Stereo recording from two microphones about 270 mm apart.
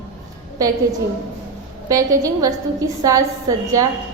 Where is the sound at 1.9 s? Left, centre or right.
Centre.